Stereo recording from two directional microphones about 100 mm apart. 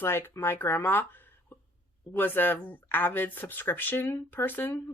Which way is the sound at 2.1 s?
20° left (ahead or behind).